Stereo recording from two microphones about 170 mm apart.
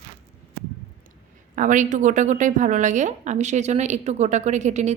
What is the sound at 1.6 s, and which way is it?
A woman's voice, 45° right (ahead or behind).